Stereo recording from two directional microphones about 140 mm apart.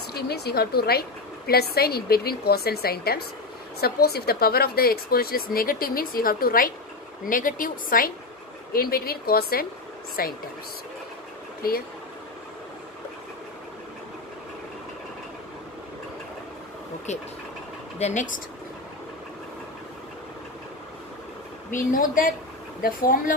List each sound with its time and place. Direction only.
0.6 s a woman's voice: 90° left
7.2 s a woman's voice: 75° left (ahead or behind); by 10.3 s 90° left
17.1 s speech: 55° left (ahead or behind)
21.9 s a woman's voice: 80° left